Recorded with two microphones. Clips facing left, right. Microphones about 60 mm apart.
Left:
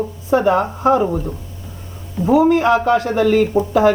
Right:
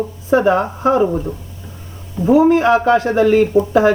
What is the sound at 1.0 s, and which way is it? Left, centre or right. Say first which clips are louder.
Speech: right 2 dB; centre.